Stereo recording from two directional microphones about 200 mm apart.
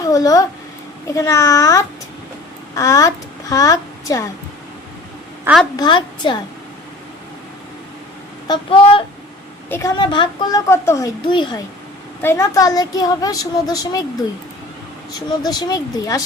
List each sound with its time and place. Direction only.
0.0 s a woman's voice: 15° left (ahead or behind)
5.7 s a woman's voice: 20° left (ahead or behind)
8.4 s a woman's voice: 25° left (ahead or behind)
9.6 s a woman's voice: 10° left (ahead or behind)
10.0 s a woman's voice: 20° left (ahead or behind)
15.3 s a woman's voice: 20° left (ahead or behind)